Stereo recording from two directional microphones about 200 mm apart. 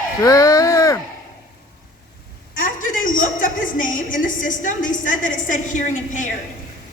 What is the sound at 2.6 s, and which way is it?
A woman's voice, 40° left (ahead or behind).